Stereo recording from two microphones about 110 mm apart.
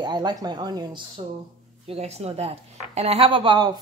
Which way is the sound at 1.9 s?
75° right (ahead or behind).